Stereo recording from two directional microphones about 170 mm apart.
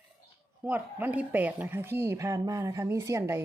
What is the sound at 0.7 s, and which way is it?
Speech, 10° right (ahead or behind).